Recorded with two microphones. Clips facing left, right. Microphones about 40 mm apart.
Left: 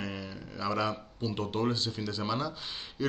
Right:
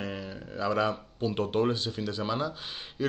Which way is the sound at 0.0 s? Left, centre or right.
Right.